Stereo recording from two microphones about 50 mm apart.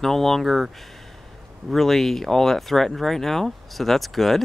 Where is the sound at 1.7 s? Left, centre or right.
Centre.